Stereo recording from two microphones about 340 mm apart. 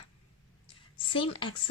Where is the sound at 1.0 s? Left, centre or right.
Centre.